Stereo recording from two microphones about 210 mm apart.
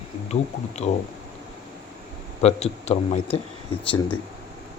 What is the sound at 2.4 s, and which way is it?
Speech, 30° left (ahead or behind).